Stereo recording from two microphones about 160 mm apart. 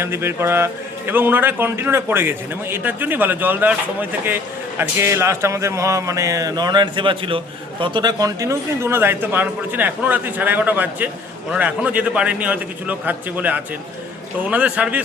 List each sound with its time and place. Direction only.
0.0 s speech: 15° right (ahead or behind)
4.8 s speech: 15° right (ahead or behind)